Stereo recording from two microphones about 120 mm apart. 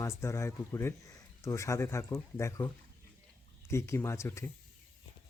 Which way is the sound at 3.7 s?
20° left (ahead or behind).